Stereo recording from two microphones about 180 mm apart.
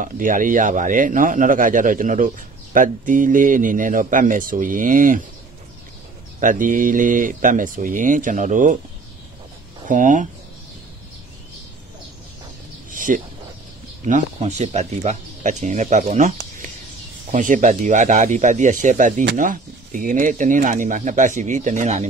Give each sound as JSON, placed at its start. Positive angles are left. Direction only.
{"t": 0.0, "sound": "a man's voice", "side_deg": -45}
{"t": 6.4, "sound": "a man's voice", "side_deg": -45}
{"t": 9.8, "sound": "a man's voice", "side_deg": -45}
{"t": 12.9, "sound": "a sound", "side_deg": -50}
{"t": 14.0, "sound": "a man's voice", "side_deg": -40}